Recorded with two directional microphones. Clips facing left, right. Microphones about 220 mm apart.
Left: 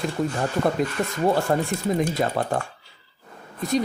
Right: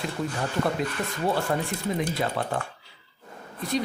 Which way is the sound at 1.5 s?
40° left (ahead or behind).